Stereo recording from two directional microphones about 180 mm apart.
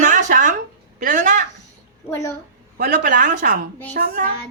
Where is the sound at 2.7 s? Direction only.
60° right (ahead or behind).